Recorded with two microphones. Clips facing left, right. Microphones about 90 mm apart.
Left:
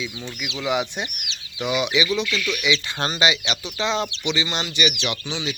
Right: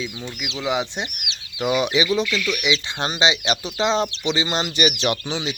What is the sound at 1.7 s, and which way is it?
Speech, 40° right (ahead or behind).